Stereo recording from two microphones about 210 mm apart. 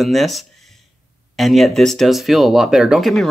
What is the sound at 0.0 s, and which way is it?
Speech, centre (ahead or behind).